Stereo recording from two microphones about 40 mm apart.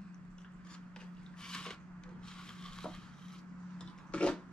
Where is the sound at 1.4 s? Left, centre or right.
Centre.